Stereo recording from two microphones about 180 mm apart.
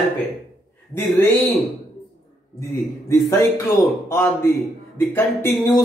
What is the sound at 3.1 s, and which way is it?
A man's voice, 15° left (ahead or behind).